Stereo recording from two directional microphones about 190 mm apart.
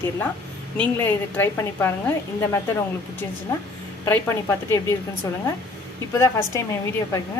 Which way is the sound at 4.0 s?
15° left (ahead or behind).